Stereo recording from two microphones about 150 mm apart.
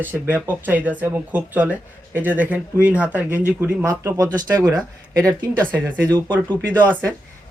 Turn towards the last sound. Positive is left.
turn(degrees=10)  # may be behind; listen again after turning